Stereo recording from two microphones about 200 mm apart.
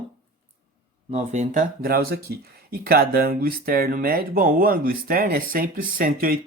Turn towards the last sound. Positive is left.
turn(degrees=-45)  # may be behind; listen again after turning